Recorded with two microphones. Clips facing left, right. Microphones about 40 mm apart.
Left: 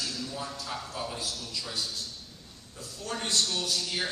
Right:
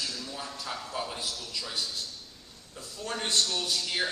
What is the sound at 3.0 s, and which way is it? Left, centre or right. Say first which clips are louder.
A man's voice: right 1 dB; right.